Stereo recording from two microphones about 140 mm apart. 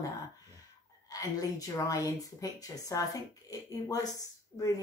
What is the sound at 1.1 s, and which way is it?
Speech, 25° left (ahead or behind).